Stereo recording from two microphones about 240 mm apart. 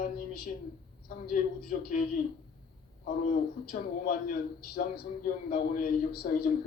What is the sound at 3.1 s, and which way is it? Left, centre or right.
A man's voice, left.